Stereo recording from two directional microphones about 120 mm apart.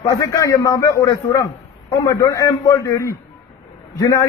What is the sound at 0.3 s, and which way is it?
A man's voice, 25° left (ahead or behind).